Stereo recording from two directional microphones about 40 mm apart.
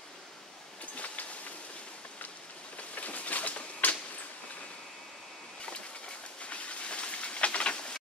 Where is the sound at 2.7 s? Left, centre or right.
Left.